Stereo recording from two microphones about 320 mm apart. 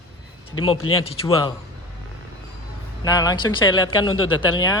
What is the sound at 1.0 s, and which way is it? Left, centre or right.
Speech, centre.